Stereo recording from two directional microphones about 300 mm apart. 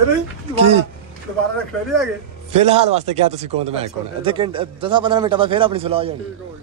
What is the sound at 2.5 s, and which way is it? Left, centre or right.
Speech, right.